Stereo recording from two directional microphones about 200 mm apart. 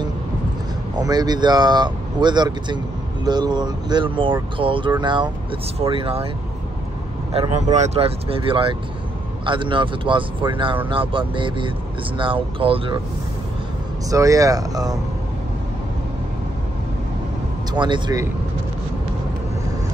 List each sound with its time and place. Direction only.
0.9 s speech: 20° right (ahead or behind)
7.7 s speech: 35° right (ahead or behind)
14.1 s speech: 15° right (ahead or behind)
17.7 s speech: 25° right (ahead or behind)